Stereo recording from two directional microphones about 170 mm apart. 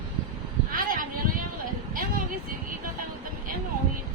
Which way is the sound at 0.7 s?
55° right (ahead or behind).